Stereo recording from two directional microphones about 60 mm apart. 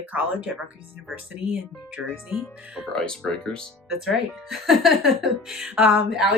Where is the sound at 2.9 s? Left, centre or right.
Centre.